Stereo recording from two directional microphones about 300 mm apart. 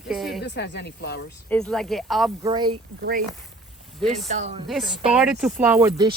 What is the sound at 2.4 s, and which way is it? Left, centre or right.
Speech, centre.